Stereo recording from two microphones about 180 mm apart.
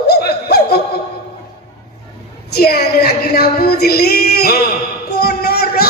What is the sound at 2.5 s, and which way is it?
Female singing, 60° left (ahead or behind).